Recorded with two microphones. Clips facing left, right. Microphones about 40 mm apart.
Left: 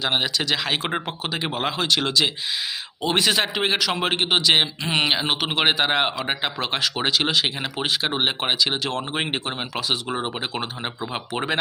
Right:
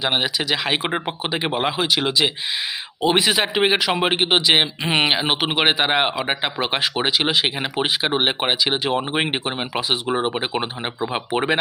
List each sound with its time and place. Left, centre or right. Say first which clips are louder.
0.0 s speech: right 2 dB; centre